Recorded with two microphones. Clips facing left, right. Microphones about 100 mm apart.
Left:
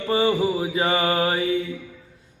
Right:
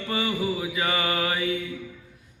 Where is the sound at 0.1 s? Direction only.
30° left (ahead or behind).